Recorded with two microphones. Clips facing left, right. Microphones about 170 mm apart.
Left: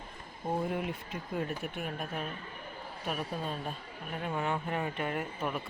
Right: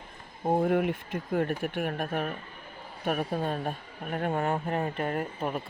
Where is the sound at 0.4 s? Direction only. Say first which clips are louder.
Right 8 dB; 55° right (ahead or behind).